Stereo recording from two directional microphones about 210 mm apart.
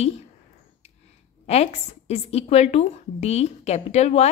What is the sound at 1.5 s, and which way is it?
A woman's voice, 30° left (ahead or behind).